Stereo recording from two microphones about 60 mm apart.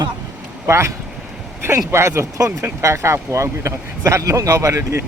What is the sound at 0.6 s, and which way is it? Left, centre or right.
Speech, right.